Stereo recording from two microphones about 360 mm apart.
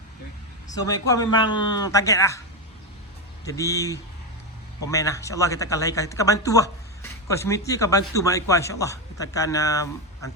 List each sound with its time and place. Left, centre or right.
0.9 s speech: centre
3.4 s speech: centre